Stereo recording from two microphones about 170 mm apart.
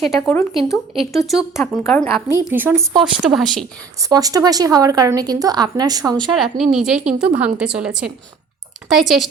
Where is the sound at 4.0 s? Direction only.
20° right (ahead or behind).